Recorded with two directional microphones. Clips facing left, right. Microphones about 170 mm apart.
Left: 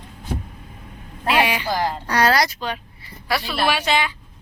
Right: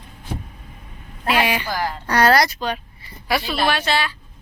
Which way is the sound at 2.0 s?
55° right (ahead or behind).